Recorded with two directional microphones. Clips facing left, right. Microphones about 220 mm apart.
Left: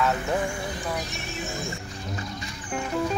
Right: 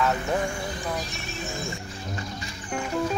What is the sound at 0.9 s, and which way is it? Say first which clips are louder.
Music: left 1 dB; 15° left (ahead or behind).